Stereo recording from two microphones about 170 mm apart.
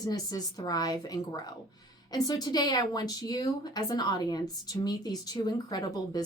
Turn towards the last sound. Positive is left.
turn(degrees=25)  # may be behind; listen again after turning